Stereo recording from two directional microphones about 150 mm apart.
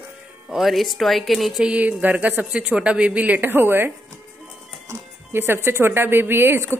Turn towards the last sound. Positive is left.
turn(degrees=-15)  # may be behind; listen again after turning